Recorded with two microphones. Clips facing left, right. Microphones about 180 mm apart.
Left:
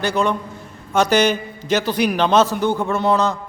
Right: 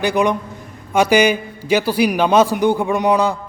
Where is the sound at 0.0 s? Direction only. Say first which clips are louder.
Right 3 dB; 15° right (ahead or behind).